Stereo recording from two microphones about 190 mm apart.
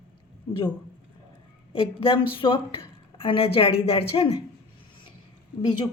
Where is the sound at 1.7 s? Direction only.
30° left (ahead or behind).